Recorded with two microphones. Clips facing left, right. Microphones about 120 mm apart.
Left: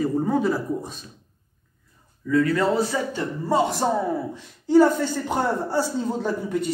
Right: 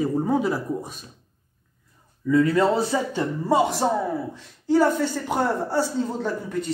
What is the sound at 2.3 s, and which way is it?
Speech, 20° right (ahead or behind).